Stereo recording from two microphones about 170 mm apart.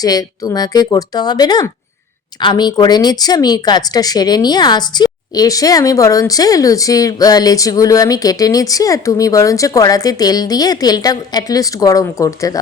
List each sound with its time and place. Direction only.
0.0 s speech: 20° left (ahead or behind)